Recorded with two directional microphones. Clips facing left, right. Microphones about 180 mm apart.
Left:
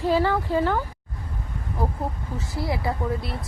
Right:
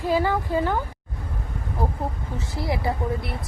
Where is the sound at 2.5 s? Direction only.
25° right (ahead or behind).